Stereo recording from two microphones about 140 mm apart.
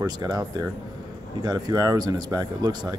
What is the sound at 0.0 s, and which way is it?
Speech, 25° right (ahead or behind).